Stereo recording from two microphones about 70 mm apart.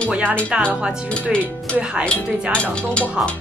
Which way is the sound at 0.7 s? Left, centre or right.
Centre.